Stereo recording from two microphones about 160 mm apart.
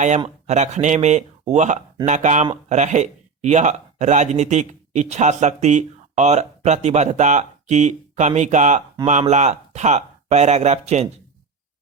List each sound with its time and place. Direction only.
0.4 s speech: 45° right (ahead or behind)